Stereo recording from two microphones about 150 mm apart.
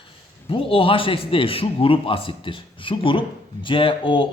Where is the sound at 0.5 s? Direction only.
35° left (ahead or behind).